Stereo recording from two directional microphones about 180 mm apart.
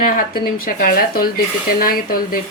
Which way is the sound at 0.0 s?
50° left (ahead or behind).